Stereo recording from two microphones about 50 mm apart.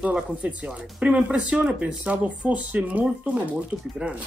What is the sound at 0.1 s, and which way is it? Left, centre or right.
Speech, right.